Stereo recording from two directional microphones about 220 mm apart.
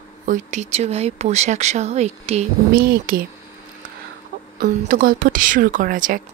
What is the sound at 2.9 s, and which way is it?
Speech, 40° right (ahead or behind).